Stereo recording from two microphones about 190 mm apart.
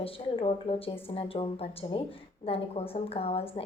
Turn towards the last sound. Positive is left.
turn(degrees=30)  # may be behind; listen again after turning